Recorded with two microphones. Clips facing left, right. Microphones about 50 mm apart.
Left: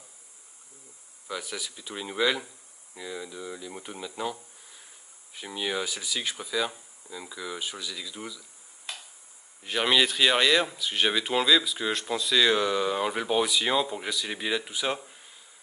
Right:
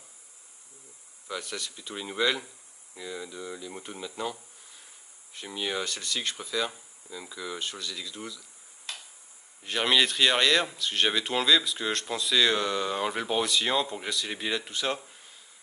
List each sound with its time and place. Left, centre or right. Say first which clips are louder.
1.2 s speech: left 1 dB; centre